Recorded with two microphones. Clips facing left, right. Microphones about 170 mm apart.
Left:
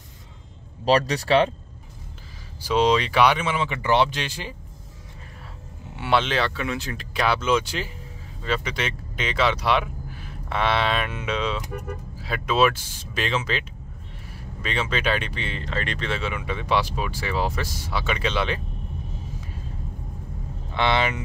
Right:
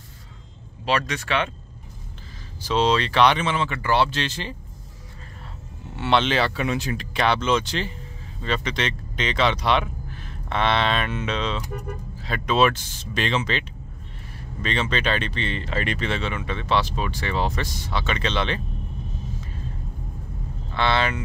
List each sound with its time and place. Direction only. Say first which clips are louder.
0.8 s speech: left 5 dB; 35° left (ahead or behind)
2.6 s speech: left 1 dB; 10° left (ahead or behind)
5.9 s speech: right 2 dB; 5° left (ahead or behind)
6.5 s speech: right 3 dB; 15° right (ahead or behind)
7.0 s speech: left 1 dB; 5° left (ahead or behind)
15.6 s speech: right 1 dB; 5° right (ahead or behind)
16.2 s speech: right 1 dB; 10° left (ahead or behind)
20.7 s speech: even; 15° left (ahead or behind)